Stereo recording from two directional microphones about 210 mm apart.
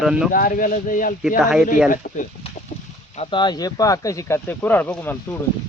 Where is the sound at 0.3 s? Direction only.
40° left (ahead or behind).